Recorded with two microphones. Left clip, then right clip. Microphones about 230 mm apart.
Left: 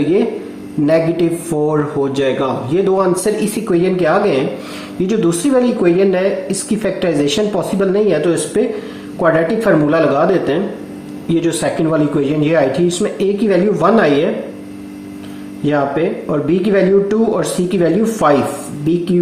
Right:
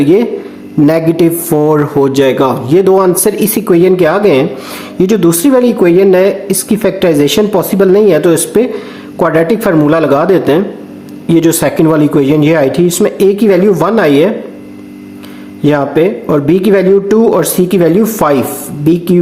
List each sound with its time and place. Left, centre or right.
0.9 s a man's voice: right
15.6 s a man's voice: right